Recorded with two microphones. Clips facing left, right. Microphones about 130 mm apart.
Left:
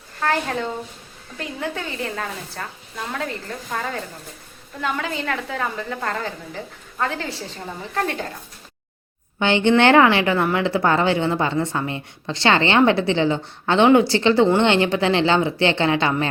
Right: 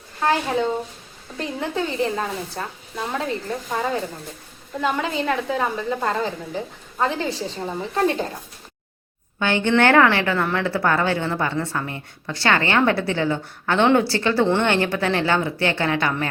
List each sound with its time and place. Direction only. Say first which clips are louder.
0.2 s a woman's voice: right 2 dB; 15° right (ahead or behind)
9.4 s a woman's voice: left 2 dB; 20° left (ahead or behind)